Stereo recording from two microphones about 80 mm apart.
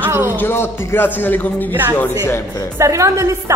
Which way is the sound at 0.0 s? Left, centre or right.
Right.